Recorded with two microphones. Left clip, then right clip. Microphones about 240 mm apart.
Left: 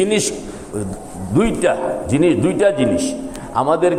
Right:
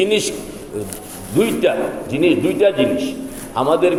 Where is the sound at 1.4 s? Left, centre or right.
Left.